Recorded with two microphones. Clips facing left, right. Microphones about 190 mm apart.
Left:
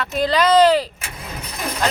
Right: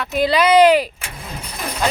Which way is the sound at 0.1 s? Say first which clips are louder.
Right 2 dB; 10° right (ahead or behind).